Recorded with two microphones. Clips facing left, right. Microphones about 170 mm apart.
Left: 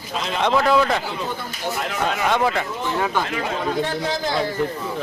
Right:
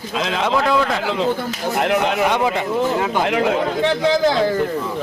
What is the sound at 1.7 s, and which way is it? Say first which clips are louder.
Speech: right 14 dB; 65° right (ahead or behind).